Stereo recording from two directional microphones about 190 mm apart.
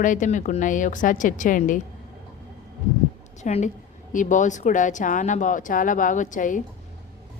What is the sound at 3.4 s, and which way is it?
A woman's voice, 40° left (ahead or behind).